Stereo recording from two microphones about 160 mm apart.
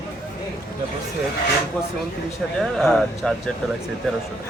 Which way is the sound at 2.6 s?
5° left (ahead or behind).